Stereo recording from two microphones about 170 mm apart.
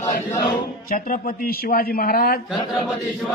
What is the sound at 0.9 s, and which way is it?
A man's voice, 55° left (ahead or behind).